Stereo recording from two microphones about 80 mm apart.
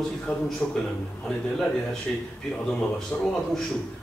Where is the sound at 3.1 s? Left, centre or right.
Centre.